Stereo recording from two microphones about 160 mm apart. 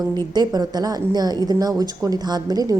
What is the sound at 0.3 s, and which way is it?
A woman's voice, 25° right (ahead or behind).